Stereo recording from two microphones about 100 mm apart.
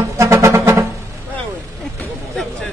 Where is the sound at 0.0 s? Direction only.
30° right (ahead or behind).